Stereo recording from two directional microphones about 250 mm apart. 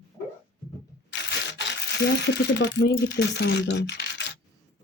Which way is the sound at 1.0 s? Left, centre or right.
Left.